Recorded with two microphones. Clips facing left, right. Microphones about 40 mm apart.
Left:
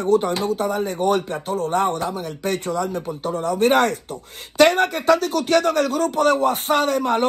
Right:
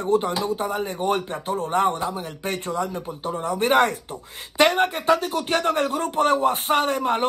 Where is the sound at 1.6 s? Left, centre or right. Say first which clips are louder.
Left 1 dB; centre.